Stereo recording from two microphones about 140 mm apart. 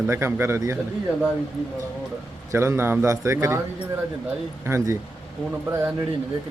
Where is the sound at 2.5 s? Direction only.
20° right (ahead or behind).